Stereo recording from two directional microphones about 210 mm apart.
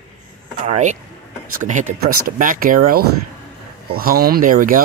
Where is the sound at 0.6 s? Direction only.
35° right (ahead or behind).